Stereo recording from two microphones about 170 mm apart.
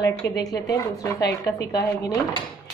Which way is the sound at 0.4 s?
20° left (ahead or behind).